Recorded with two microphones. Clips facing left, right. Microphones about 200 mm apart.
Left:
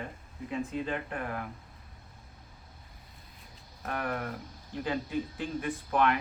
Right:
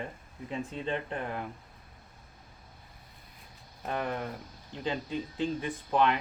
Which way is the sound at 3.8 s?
20° right (ahead or behind).